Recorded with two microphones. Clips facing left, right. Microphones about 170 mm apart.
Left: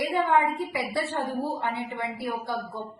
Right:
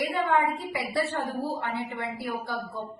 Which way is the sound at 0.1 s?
20° left (ahead or behind).